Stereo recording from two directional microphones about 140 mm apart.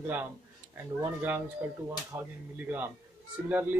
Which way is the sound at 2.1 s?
25° right (ahead or behind).